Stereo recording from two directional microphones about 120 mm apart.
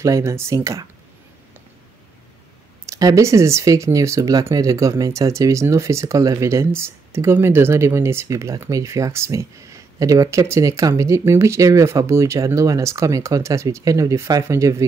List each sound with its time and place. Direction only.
0.0 s speech: 25° right (ahead or behind)
2.9 s speech: 30° right (ahead or behind)